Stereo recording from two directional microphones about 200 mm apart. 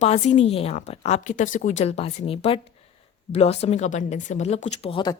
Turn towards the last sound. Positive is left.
turn(degrees=25)  # may be behind; listen again after turning